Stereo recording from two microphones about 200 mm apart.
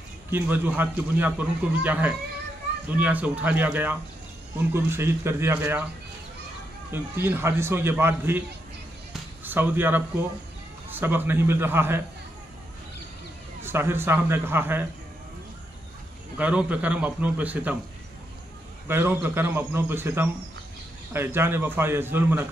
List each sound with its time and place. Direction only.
0.3 s a man's voice: 10° right (ahead or behind)
6.9 s a man's voice: 10° right (ahead or behind)
13.6 s a man's voice: 10° right (ahead or behind)
16.3 s a man's voice: 10° right (ahead or behind)
18.9 s a man's voice: 10° right (ahead or behind)